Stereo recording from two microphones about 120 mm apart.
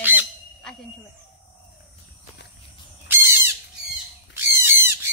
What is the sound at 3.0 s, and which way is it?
Bird, 20° right (ahead or behind).